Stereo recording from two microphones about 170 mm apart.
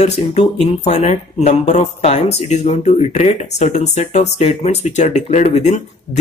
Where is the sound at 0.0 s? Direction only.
40° left (ahead or behind).